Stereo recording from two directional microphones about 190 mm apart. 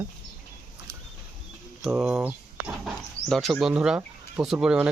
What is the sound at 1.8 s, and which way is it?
Speech, 5° right (ahead or behind).